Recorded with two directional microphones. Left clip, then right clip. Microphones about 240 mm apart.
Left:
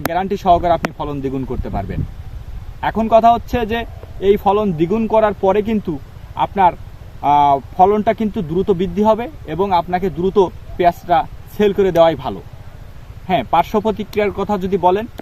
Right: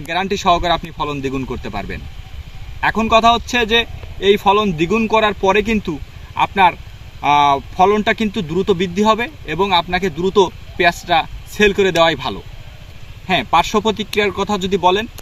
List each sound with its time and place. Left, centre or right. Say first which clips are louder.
0.1 s speech: even; centre